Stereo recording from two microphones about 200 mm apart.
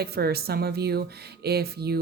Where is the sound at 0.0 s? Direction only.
50° right (ahead or behind).